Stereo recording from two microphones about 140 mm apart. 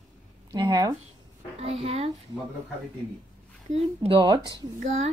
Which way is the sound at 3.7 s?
45° right (ahead or behind).